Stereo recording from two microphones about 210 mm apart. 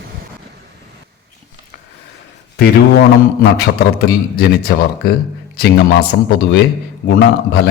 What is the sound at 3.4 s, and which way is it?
Speech, 50° left (ahead or behind).